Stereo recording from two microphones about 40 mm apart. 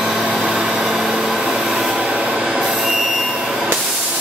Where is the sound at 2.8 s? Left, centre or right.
Centre.